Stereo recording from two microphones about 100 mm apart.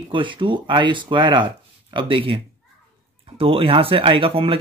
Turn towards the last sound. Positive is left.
turn(degrees=-65)  # may be behind; listen again after turning